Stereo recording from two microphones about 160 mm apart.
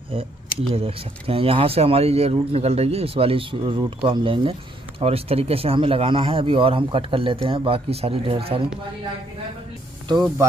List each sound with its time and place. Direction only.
0.1 s speech: 35° right (ahead or behind)